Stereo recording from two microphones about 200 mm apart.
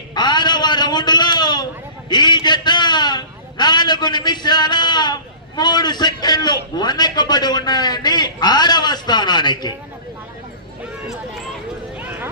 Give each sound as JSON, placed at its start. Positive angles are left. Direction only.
{"t": 0.1, "sound": "a sound", "side_deg": 20}
{"t": 2.0, "sound": "a man's voice", "side_deg": 20}
{"t": 11.9, "sound": "clip-clop", "side_deg": -10}